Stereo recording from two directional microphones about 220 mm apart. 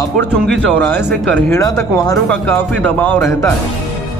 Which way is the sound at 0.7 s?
5° left (ahead or behind).